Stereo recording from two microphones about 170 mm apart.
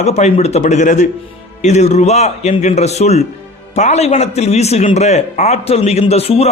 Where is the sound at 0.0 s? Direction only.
40° left (ahead or behind).